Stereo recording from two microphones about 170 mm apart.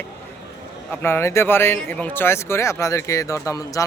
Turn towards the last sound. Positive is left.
turn(degrees=20)  # may be behind; listen again after turning